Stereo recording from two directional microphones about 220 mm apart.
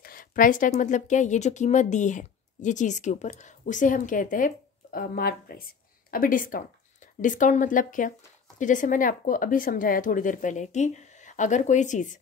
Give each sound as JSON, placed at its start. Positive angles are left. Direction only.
{"t": 0.0, "sound": "speech", "side_deg": 40}